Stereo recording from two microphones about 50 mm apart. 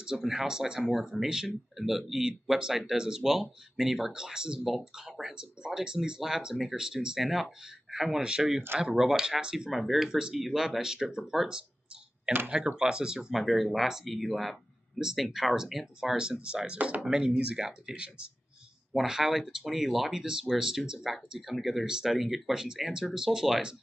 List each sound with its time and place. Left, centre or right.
0.2 s speech: centre
5.8 s speech: centre
9.7 s speech: centre
10.0 s speech: centre
13.3 s speech: centre
16.7 s speech: right
17.0 s speech: centre
18.9 s speech: centre